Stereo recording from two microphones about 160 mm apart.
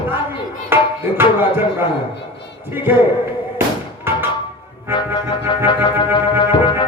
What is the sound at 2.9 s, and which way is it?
Speech, 10° right (ahead or behind).